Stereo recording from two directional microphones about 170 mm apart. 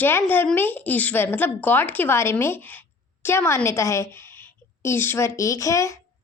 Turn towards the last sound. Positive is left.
turn(degrees=20)  # may be behind; listen again after turning